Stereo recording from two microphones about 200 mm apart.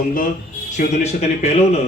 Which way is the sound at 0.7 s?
35° left (ahead or behind).